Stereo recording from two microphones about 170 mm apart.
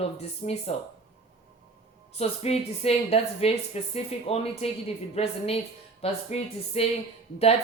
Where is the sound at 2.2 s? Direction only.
40° left (ahead or behind).